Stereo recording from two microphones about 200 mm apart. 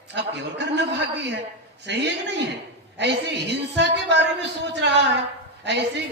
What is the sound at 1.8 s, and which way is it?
Speech, 60° right (ahead or behind).